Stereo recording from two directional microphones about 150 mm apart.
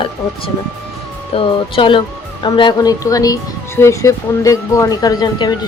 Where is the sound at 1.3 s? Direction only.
35° left (ahead or behind).